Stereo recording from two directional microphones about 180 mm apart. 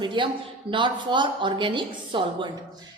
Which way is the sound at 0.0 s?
25° right (ahead or behind).